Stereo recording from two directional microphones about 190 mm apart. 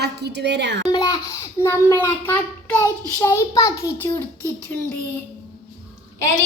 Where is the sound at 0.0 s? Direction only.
60° right (ahead or behind).